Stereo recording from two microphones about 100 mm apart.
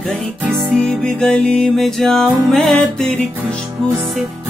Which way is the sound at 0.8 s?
5° left (ahead or behind).